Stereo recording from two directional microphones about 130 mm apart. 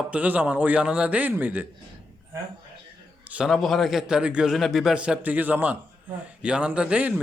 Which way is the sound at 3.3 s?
10° right (ahead or behind).